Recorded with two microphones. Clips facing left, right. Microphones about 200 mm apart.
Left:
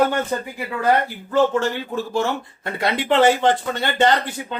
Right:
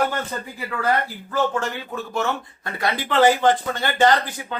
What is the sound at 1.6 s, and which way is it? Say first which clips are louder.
Speech: left 5 dB; 30° left (ahead or behind).